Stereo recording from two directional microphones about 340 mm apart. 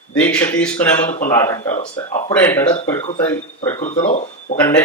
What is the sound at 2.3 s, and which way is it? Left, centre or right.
Speech, centre.